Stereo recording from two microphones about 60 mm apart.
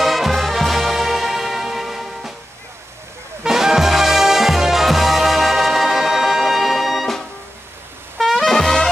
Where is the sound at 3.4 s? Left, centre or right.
Centre.